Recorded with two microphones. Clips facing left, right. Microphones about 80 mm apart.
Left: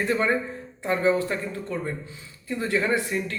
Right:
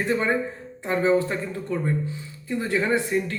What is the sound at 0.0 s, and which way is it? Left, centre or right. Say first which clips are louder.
A man's voice: even; centre.